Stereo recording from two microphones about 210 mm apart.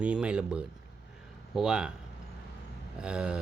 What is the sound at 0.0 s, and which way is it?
Speech, 5° right (ahead or behind).